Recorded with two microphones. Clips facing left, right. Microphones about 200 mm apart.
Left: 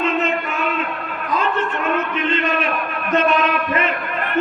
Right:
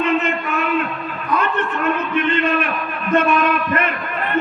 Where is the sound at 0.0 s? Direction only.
60° right (ahead or behind).